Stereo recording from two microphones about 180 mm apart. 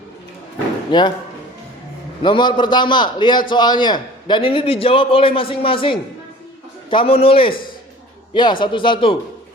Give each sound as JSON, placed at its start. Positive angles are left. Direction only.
{"t": 0.9, "sound": "speech", "side_deg": 25}
{"t": 2.2, "sound": "a man's voice", "side_deg": 25}